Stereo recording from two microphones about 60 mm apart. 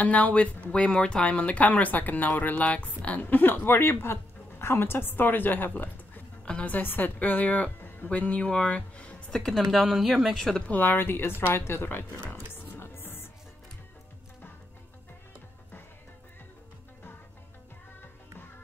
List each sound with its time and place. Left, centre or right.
0.0 s speech: left
6.4 s speech: centre
9.3 s a woman's voice: centre
10.7 s speech: left
12.7 s music: left